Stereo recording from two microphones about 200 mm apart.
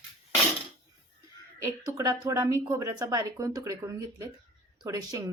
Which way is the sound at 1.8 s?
15° right (ahead or behind).